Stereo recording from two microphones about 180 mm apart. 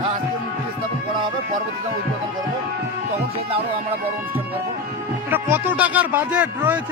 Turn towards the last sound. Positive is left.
turn(degrees=-10)  # may be behind; listen again after turning